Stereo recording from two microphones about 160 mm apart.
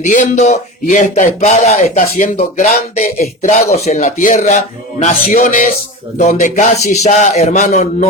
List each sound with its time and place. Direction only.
0.0 s speech: 50° left (ahead or behind)